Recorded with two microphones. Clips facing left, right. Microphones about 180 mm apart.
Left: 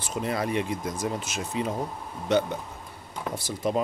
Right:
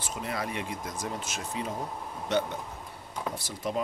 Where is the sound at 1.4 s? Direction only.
15° left (ahead or behind).